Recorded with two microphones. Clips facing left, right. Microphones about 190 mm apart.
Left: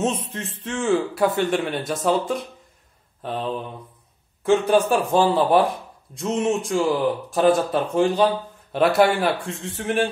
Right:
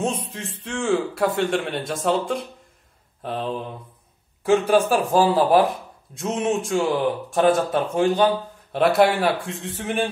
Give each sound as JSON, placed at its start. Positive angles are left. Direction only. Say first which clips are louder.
{"t": 0.0, "sound": "a man's voice", "louder": "left 2 dB", "side_deg": 0}
{"t": 4.6, "sound": "a man's voice", "louder": "even", "side_deg": 0}